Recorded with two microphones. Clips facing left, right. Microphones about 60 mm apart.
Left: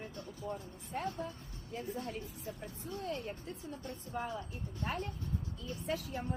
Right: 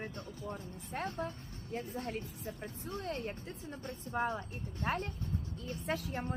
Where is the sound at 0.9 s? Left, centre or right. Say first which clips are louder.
Even; right.